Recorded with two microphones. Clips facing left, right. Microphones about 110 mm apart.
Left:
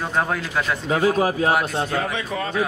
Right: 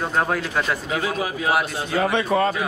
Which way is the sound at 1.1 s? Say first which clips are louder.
Left 5 dB; 35° left (ahead or behind).